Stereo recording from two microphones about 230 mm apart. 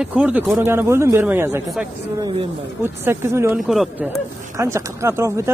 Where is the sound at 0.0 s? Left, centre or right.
Centre.